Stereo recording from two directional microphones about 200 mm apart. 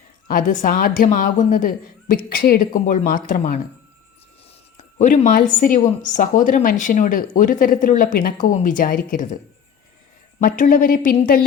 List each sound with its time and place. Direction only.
0.3 s a woman's voice: 40° left (ahead or behind)
4.9 s a woman's voice: 40° left (ahead or behind)
10.6 s a woman's voice: 45° left (ahead or behind)